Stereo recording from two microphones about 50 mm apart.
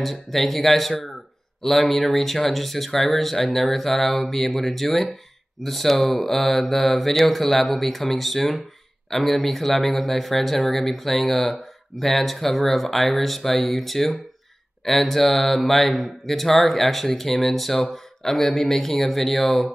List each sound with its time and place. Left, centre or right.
0.0 s speech: centre